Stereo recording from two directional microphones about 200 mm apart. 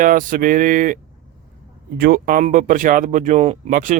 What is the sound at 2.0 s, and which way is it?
Speech, 45° right (ahead or behind).